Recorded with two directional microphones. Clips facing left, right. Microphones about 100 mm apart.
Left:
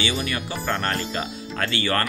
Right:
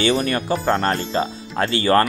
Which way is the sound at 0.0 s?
45° right (ahead or behind).